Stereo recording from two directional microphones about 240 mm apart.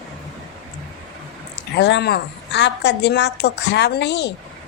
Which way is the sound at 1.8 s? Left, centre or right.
Left.